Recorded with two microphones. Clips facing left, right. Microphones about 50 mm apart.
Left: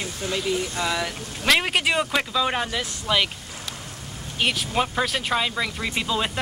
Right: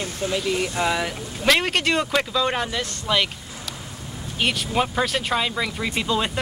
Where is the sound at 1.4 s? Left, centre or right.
Centre.